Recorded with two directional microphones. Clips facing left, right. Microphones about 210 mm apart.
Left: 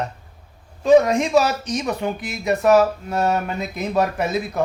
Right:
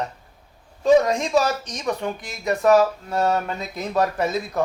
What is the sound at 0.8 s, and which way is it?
Speech, centre (ahead or behind).